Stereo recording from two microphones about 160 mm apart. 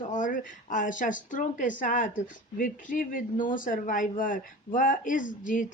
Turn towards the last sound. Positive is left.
turn(degrees=55)  # may be behind; listen again after turning